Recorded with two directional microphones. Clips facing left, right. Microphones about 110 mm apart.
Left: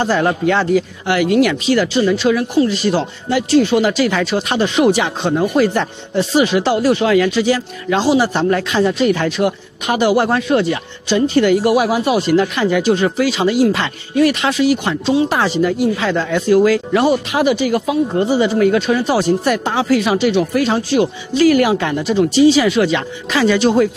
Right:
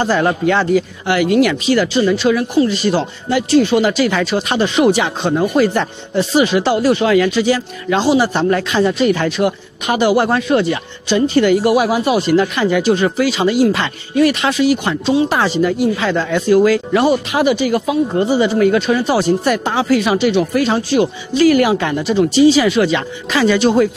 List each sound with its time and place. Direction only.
0.1 s speech: 15° right (ahead or behind)
6.1 s speech: 10° right (ahead or behind)
15.2 s speech: 25° right (ahead or behind)
15.6 s speech: 15° right (ahead or behind)